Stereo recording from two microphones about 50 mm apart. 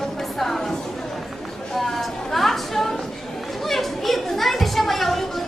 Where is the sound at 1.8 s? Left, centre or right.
Centre.